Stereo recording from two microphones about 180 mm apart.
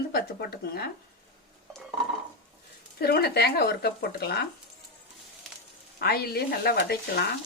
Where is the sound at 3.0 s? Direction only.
65° left (ahead or behind).